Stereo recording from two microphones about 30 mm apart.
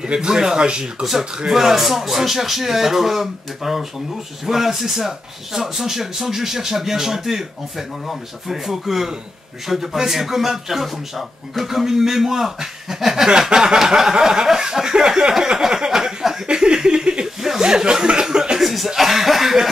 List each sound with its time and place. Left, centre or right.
0.0 s speech: right
0.3 s speech: centre
0.6 s speech: right
1.5 s a man's voice: centre
16.4 s a sound: right
17.6 s speech: right
18.6 s a man's voice: centre